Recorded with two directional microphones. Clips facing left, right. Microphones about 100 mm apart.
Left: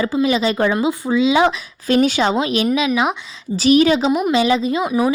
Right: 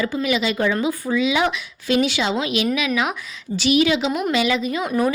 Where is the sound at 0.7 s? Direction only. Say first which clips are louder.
Left 4 dB; 20° left (ahead or behind).